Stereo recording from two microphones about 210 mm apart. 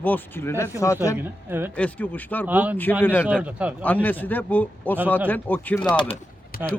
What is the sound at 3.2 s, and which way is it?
Speech, 5° right (ahead or behind).